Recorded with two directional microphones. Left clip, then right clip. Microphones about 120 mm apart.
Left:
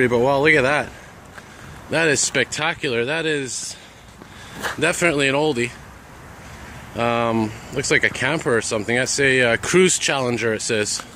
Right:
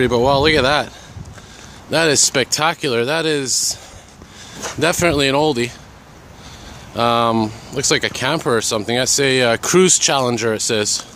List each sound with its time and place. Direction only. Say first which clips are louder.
0.0 s speech: right 2 dB; 40° right (ahead or behind)
1.9 s speech: right 3 dB; 35° right (ahead or behind)
2.1 s speech: right 4 dB; 50° right (ahead or behind)
4.7 s speech: right 3 dB; 55° right (ahead or behind)
7.0 s speech: right 5 dB; 40° right (ahead or behind)